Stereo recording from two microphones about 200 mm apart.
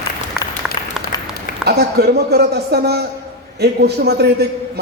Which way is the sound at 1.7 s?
55° right (ahead or behind).